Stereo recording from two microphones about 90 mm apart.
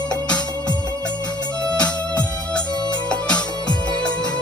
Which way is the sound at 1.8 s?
15° left (ahead or behind).